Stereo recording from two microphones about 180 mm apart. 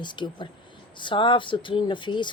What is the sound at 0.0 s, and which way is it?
Speech, 25° left (ahead or behind).